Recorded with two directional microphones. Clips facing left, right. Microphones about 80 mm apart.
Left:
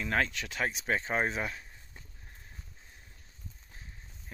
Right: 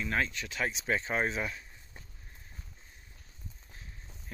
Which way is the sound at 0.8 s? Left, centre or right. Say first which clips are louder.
Even; left.